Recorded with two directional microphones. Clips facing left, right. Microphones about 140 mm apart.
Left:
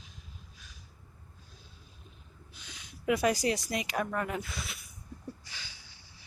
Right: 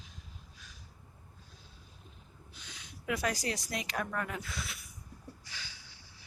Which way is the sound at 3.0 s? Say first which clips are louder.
Left 7 dB; 15° left (ahead or behind).